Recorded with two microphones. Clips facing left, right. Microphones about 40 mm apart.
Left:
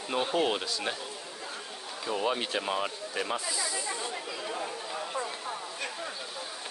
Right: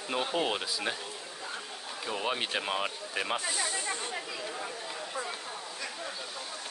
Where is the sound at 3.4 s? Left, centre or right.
Right.